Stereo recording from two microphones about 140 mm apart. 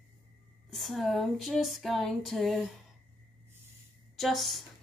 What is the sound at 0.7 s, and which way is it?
A woman's voice, centre (ahead or behind).